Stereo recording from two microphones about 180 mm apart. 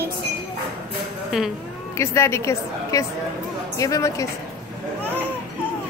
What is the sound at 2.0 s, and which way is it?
A woman's voice, 15° left (ahead or behind).